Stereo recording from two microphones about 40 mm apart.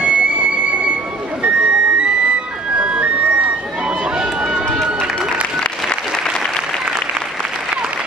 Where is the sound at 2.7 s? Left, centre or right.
Right.